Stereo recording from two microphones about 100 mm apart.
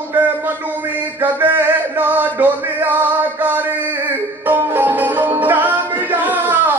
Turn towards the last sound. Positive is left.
turn(degrees=-20)  # may be behind; listen again after turning